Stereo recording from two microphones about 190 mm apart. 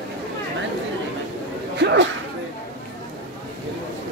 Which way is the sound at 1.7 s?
70° right (ahead or behind).